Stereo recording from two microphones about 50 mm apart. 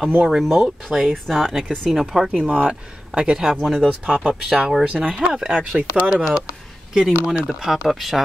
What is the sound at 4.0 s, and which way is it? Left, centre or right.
Speech, right.